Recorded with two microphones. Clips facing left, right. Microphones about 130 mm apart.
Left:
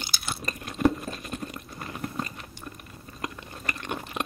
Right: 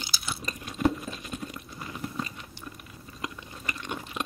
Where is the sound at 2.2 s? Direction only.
50° left (ahead or behind).